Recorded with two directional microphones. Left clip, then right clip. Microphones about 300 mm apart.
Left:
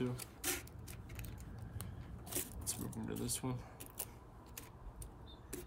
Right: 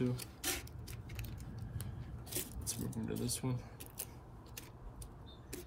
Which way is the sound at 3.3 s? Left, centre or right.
Centre.